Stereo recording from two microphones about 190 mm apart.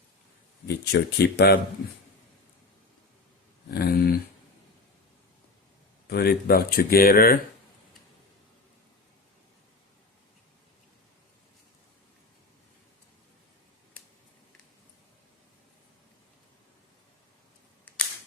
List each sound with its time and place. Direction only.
0.7 s speech: 60° left (ahead or behind)
3.7 s speech: 55° left (ahead or behind)
6.1 s speech: 55° left (ahead or behind)